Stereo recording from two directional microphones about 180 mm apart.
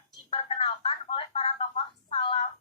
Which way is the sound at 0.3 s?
35° left (ahead or behind).